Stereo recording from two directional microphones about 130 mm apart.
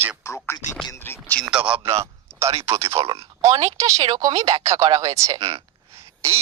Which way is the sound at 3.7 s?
25° right (ahead or behind).